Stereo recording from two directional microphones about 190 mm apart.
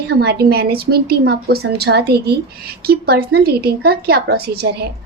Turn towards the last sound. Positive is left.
turn(degrees=-55)  # may be behind; listen again after turning